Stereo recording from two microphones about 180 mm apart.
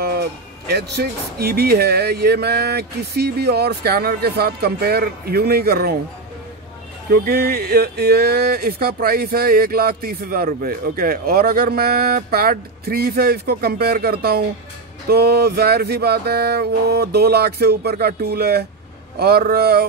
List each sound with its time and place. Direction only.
0.0 s music: 60° right (ahead or behind)
7.1 s music: 60° right (ahead or behind)